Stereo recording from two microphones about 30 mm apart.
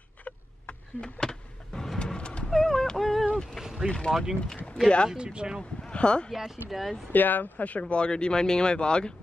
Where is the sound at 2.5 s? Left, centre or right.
Centre.